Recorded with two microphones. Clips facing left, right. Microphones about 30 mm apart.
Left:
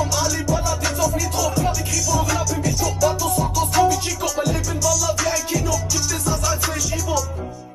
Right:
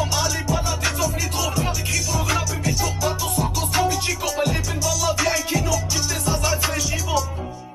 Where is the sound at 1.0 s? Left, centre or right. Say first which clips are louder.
Left 3 dB; right.